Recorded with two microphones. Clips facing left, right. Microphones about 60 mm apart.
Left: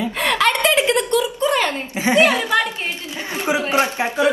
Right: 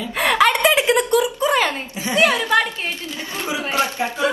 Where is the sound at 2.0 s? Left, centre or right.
Left.